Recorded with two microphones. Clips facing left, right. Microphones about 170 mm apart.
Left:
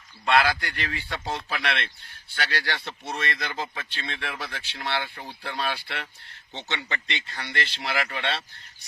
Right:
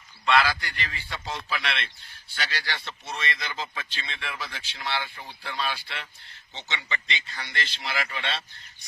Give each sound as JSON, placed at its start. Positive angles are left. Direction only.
{"t": 0.3, "sound": "speech", "side_deg": 55}
{"t": 6.8, "sound": "speech", "side_deg": 45}